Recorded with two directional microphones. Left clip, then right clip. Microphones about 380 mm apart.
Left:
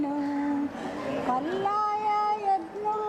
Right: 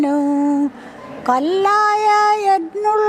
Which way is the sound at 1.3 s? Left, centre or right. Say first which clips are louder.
Right 15 dB; right.